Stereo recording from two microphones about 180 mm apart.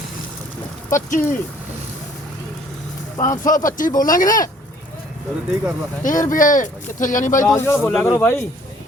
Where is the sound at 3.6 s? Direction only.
50° left (ahead or behind).